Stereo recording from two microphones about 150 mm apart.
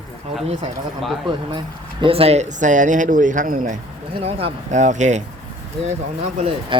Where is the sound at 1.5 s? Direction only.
35° right (ahead or behind); by 3.8 s 65° right (ahead or behind).